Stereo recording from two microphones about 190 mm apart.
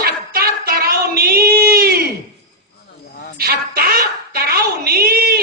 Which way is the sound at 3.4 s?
55° right (ahead or behind).